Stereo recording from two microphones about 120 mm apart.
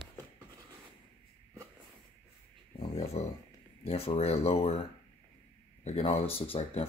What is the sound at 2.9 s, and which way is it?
Speech, 60° left (ahead or behind).